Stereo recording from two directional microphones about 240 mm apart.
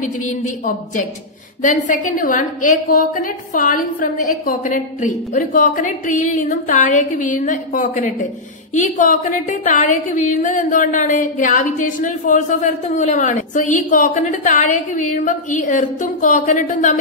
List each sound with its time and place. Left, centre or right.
0.0 s a woman's voice: left